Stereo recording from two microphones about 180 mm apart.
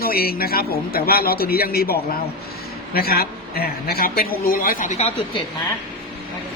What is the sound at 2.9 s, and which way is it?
Speech, 60° left (ahead or behind).